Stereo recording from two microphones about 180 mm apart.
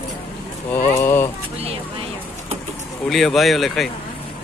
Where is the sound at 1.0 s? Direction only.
15° left (ahead or behind).